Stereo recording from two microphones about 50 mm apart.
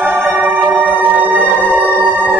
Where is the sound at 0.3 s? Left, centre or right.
Centre.